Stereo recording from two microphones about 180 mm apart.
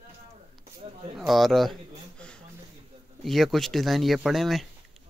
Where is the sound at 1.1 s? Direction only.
Centre (ahead or behind).